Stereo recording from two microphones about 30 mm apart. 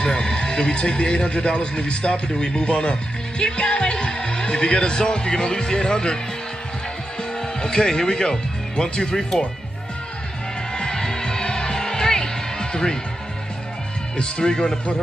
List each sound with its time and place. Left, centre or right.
0.0 s a man's voice: left
7.6 s speech: left
10.7 s music: left
14.1 s speech: left